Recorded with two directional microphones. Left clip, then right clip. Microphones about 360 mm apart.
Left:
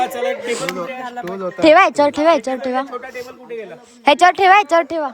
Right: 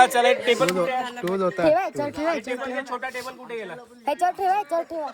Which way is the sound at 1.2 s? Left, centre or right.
Centre.